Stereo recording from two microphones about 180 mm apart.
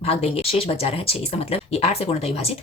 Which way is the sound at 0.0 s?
35° left (ahead or behind).